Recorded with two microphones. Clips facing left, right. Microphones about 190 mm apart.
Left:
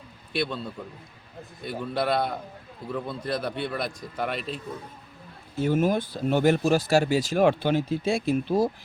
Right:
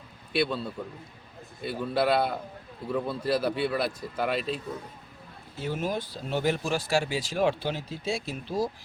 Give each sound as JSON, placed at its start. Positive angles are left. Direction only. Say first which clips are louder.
{"t": 0.3, "sound": "speech", "louder": "right 2 dB", "side_deg": -5}
{"t": 1.8, "sound": "speech", "louder": "right 1 dB", "side_deg": -5}
{"t": 5.5, "sound": "speech", "louder": "left 7 dB", "side_deg": 50}